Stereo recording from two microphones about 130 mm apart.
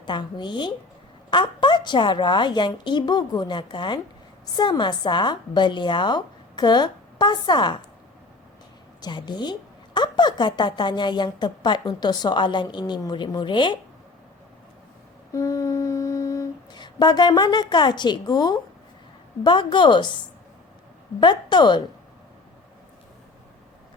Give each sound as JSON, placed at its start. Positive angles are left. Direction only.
{"t": 0.0, "sound": "a woman's voice", "side_deg": 35}
{"t": 9.0, "sound": "a woman's voice", "side_deg": 35}
{"t": 15.3, "sound": "humming", "side_deg": 25}
{"t": 16.7, "sound": "a woman's voice", "side_deg": 35}
{"t": 21.2, "sound": "a woman's voice", "side_deg": 35}